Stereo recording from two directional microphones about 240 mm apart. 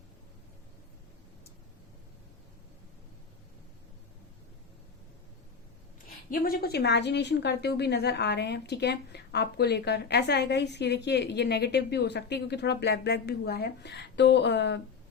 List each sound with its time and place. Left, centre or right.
6.3 s a woman's voice: left